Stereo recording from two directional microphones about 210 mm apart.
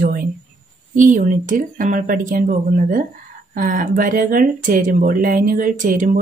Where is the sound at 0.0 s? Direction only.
40° right (ahead or behind).